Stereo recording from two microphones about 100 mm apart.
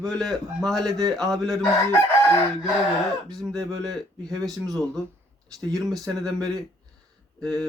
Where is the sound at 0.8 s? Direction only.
40° right (ahead or behind).